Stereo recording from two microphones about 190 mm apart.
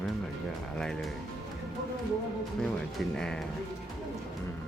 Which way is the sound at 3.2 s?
5° left (ahead or behind).